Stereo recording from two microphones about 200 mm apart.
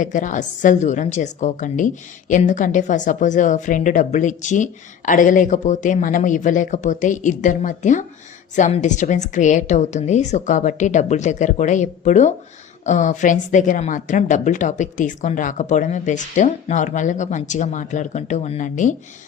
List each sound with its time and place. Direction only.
0.0 s a woman's voice: 40° left (ahead or behind)